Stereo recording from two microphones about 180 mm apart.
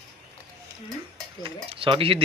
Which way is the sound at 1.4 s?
30° right (ahead or behind).